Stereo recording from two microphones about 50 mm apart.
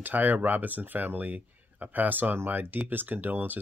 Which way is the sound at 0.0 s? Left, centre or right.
Right.